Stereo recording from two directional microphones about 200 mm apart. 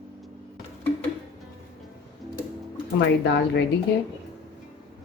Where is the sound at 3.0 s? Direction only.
60° left (ahead or behind).